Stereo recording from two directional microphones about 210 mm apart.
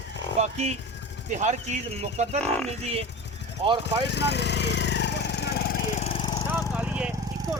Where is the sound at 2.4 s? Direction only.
5° left (ahead or behind).